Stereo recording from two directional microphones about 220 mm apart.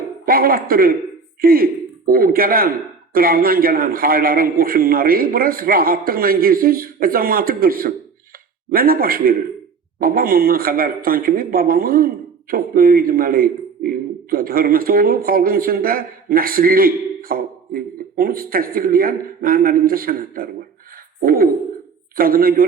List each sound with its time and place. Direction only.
0.3 s speech: 40° right (ahead or behind)